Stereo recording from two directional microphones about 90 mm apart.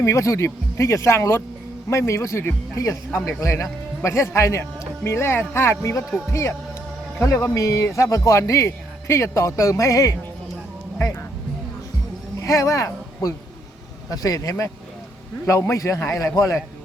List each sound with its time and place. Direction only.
0.0 s a man's voice: 35° left (ahead or behind)
12.4 s a man's voice: 35° left (ahead or behind)